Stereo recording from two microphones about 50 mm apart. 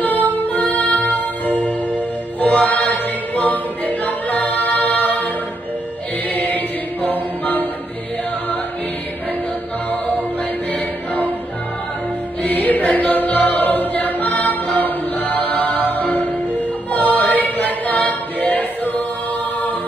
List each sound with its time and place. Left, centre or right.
0.0 s music: left
2.4 s choir: left
6.3 s mantra: left
10.7 s choir: left
12.4 s choir: left
16.1 s music: left
18.5 s choir: left